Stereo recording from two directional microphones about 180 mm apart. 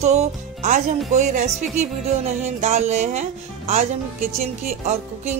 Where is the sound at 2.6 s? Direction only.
40° right (ahead or behind).